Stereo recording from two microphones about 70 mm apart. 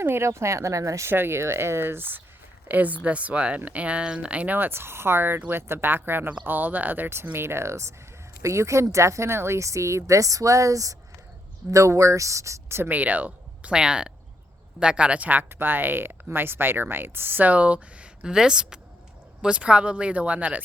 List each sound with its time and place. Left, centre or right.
0.0 s speech: right
1.1 s speech: right
12.9 s speech: right